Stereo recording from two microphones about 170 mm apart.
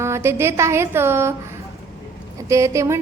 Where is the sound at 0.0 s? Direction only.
15° right (ahead or behind).